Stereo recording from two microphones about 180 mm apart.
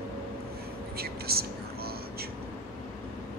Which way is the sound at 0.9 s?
60° right (ahead or behind).